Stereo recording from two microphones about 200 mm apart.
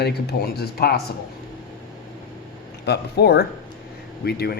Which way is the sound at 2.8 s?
55° left (ahead or behind).